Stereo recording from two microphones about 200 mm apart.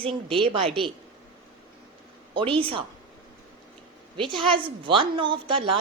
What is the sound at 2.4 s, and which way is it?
Speech, 25° right (ahead or behind).